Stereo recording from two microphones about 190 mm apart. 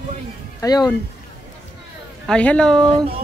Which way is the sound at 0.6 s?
20° left (ahead or behind).